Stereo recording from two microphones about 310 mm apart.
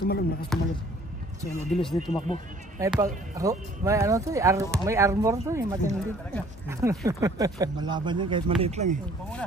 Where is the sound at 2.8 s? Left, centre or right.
Centre.